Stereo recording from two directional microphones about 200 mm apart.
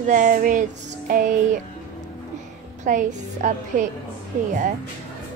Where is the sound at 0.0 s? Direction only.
40° right (ahead or behind).